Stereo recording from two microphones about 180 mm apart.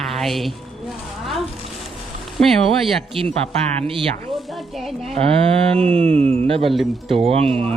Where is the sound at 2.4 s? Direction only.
Centre (ahead or behind).